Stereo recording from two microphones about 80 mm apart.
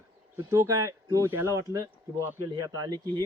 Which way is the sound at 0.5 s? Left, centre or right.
Right.